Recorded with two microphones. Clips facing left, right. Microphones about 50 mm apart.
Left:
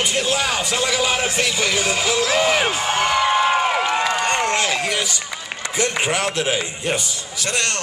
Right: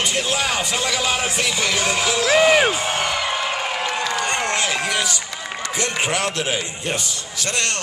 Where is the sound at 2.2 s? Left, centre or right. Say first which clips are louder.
Right 5 dB; centre.